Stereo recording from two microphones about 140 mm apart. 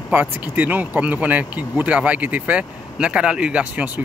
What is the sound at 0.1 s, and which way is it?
Speech, 10° right (ahead or behind).